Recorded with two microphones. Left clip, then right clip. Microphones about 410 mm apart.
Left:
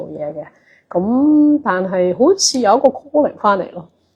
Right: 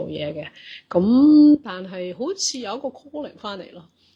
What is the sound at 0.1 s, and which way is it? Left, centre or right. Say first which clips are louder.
Speech: left 4 dB; centre.